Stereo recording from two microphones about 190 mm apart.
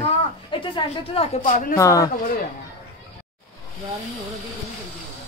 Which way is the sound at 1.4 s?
45° left (ahead or behind).